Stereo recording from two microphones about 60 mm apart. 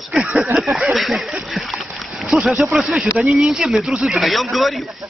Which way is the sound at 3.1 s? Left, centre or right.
Centre.